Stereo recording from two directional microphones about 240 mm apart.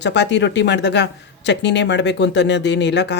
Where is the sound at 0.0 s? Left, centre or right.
Left.